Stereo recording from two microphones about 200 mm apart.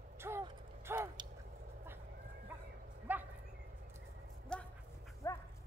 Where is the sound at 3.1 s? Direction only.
10° right (ahead or behind).